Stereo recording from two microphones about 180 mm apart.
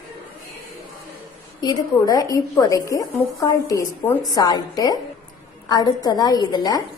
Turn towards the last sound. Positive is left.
turn(degrees=20)  # may be behind; listen again after turning